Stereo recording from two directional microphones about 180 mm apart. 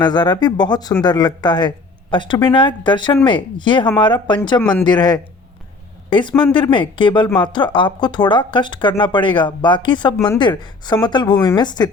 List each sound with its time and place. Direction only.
0.0 s speech: 25° left (ahead or behind)
4.6 s speech: 5° left (ahead or behind)
4.9 s speech: 25° left (ahead or behind)